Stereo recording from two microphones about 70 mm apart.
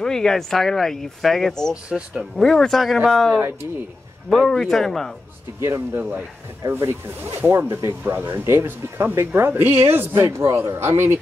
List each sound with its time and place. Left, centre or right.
0.0 s speech: centre
1.9 s speech: centre
2.3 s speech: centre
4.5 s speech: centre
5.6 s speech: right
6.6 s speech: right